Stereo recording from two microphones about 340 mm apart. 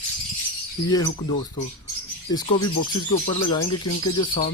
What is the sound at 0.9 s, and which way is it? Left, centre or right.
Speech, centre.